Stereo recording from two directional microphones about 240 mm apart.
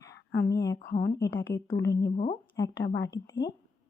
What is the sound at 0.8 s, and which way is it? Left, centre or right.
Speech, left.